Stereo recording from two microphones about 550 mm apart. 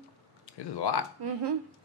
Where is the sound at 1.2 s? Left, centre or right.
Right.